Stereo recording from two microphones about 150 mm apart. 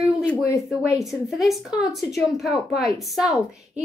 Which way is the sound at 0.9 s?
Centre (ahead or behind).